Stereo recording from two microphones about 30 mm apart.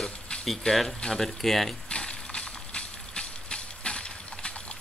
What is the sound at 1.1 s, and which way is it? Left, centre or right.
Speech, centre.